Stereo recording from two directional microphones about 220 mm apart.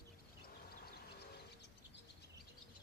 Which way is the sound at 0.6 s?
45° left (ahead or behind).